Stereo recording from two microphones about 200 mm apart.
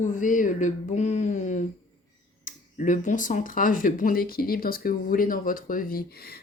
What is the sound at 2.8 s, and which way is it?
Speech, 40° left (ahead or behind).